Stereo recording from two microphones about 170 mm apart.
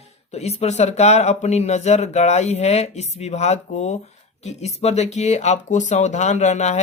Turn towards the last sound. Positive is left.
turn(degrees=45)  # may be behind; listen again after turning